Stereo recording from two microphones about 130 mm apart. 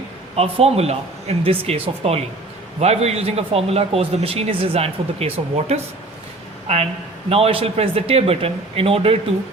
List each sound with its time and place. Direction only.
0.3 s speech: 50° right (ahead or behind)